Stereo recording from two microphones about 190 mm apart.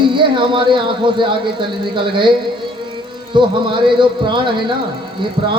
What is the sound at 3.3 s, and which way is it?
Speech, 25° right (ahead or behind).